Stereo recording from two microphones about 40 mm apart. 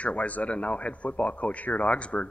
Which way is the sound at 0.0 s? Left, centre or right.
Left.